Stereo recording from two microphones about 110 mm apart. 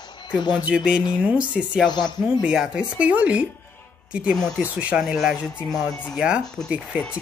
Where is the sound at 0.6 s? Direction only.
10° right (ahead or behind).